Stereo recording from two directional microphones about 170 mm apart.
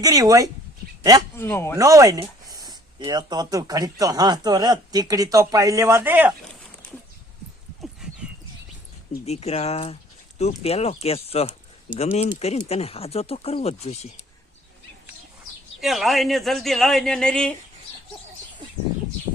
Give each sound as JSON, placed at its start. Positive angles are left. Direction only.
{"t": 0.0, "sound": "speech", "side_deg": -20}
{"t": 1.4, "sound": "speech", "side_deg": 15}
{"t": 1.7, "sound": "speech", "side_deg": -20}
{"t": 7.8, "sound": "dog", "side_deg": -5}
{"t": 9.2, "sound": "speech", "side_deg": 40}
{"t": 15.8, "sound": "speech", "side_deg": 0}